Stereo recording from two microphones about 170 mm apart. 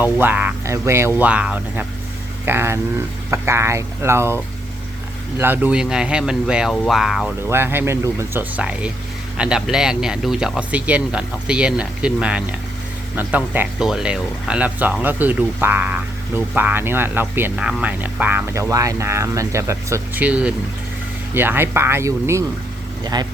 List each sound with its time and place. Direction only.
0.0 s speech: 10° right (ahead or behind)
5.4 s speech: 10° right (ahead or behind)
7.5 s speech: 15° right (ahead or behind)